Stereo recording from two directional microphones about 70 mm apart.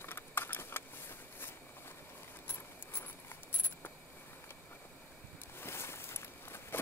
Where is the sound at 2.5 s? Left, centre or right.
Left.